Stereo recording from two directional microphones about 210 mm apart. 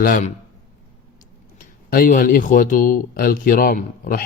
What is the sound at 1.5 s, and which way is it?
A man's voice, 40° left (ahead or behind).